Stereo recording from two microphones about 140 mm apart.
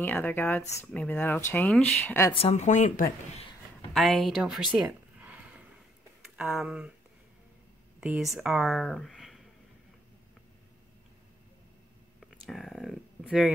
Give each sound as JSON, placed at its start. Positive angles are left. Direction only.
{"t": 0.0, "sound": "speech", "side_deg": 15}
{"t": 2.0, "sound": "speech", "side_deg": 15}
{"t": 2.3, "sound": "a woman's voice", "side_deg": 50}
{"t": 3.9, "sound": "speech", "side_deg": 0}
{"t": 4.8, "sound": "a sound", "side_deg": -10}
{"t": 6.3, "sound": "speech", "side_deg": -5}
{"t": 8.0, "sound": "speech", "side_deg": 0}
{"t": 12.2, "sound": "a sound", "side_deg": 0}
{"t": 13.2, "sound": "speech", "side_deg": -5}